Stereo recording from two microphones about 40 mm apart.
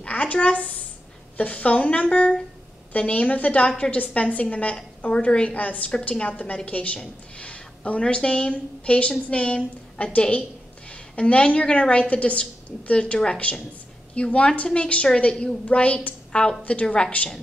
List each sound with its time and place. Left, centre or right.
0.0 s a woman's voice: left
16.3 s a sound: left
16.8 s a woman's voice: left